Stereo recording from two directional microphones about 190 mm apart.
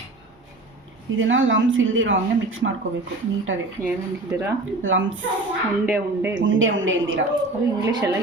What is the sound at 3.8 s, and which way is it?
Speech, 15° right (ahead or behind).